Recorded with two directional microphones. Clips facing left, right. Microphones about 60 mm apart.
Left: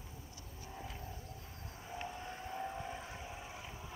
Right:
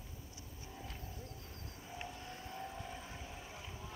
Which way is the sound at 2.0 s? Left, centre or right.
Centre.